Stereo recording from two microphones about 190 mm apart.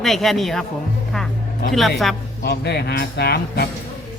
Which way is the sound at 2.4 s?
60° left (ahead or behind).